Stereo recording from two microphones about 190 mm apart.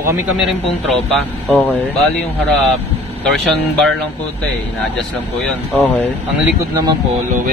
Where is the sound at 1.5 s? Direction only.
10° left (ahead or behind).